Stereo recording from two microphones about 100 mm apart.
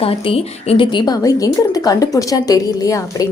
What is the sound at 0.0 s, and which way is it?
Speech, 75° left (ahead or behind).